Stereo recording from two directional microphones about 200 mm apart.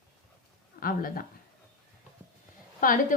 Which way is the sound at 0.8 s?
45° left (ahead or behind).